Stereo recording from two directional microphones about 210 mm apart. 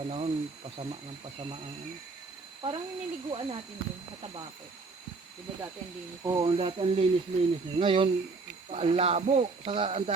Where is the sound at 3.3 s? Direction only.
25° right (ahead or behind).